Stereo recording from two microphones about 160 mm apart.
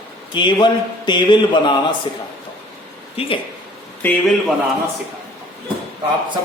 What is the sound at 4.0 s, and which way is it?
Speech, 10° left (ahead or behind).